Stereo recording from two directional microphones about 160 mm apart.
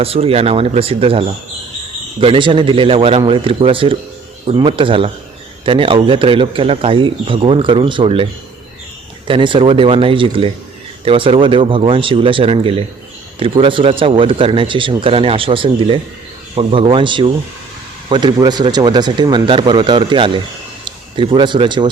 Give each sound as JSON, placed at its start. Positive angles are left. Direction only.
{"t": 0.0, "sound": "speech", "side_deg": -35}
{"t": 2.2, "sound": "a man's voice", "side_deg": -30}